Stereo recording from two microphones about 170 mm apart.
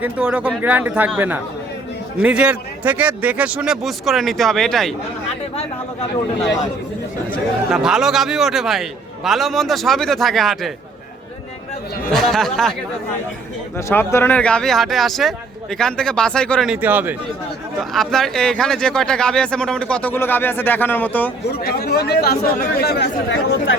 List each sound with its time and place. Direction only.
0.0 s a man's voice: 5° right (ahead or behind)
7.3 s speech: centre (ahead or behind)
12.1 s speech: centre (ahead or behind)
13.7 s speech: 15° left (ahead or behind); by 17.2 s 10° right (ahead or behind)
17.9 s speech: centre (ahead or behind)
21.6 s speech: 65° left (ahead or behind)